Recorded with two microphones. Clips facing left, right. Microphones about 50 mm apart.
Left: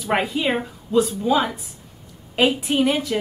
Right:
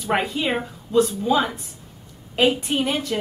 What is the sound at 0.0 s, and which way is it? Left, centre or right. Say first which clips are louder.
A woman's voice: left 1 dB; centre.